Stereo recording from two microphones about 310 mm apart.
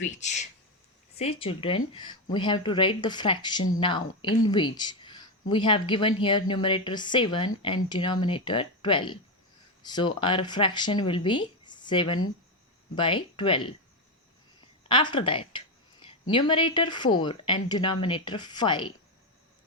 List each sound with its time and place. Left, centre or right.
0.1 s speech: left
14.8 s a sound: centre
16.3 s speech: centre